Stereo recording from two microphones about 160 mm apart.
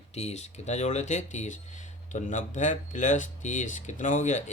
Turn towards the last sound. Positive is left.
turn(degrees=50)  # may be behind; listen again after turning